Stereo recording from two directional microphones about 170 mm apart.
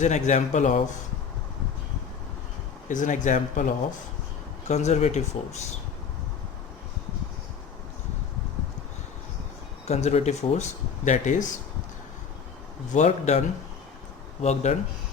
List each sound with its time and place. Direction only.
0.0 s a man's voice: 45° left (ahead or behind)
2.9 s a man's voice: 50° left (ahead or behind)
4.7 s speech: 40° left (ahead or behind)
9.8 s speech: 40° left (ahead or behind)
12.9 s a man's voice: 45° left (ahead or behind)
14.4 s speech: 40° left (ahead or behind)